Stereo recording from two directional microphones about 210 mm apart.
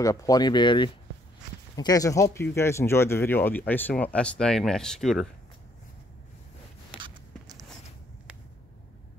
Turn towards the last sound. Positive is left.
turn(degrees=-20)  # may be behind; listen again after turning